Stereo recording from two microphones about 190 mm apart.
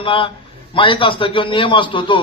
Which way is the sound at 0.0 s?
25° left (ahead or behind).